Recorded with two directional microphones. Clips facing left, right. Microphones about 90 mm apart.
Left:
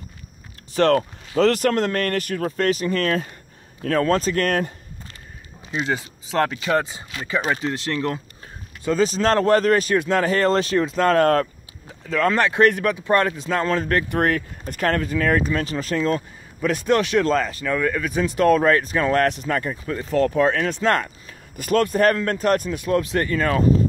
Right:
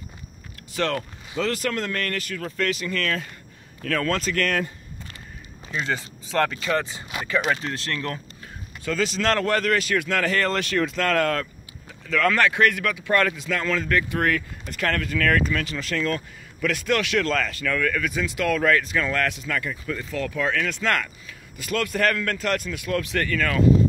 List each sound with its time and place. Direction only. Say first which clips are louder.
0.8 s speech: left 8 dB; 35° left (ahead or behind)
1.3 s speech: left 8 dB; 55° left (ahead or behind)
1.7 s speech: left 6 dB; 45° left (ahead or behind)
5.7 s speech: left 3 dB; 10° left (ahead or behind)
6.5 s speech: left 3 dB; 25° left (ahead or behind)
7.9 s speech: left 5 dB; 25° left (ahead or behind)
18.1 s speech: left 7 dB; 40° left (ahead or behind)